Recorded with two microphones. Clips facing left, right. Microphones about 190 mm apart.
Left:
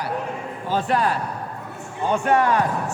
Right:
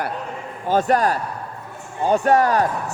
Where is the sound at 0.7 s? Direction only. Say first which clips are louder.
Right 4 dB; 45° right (ahead or behind).